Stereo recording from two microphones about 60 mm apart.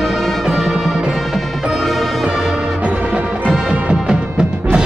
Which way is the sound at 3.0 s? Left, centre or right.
Centre.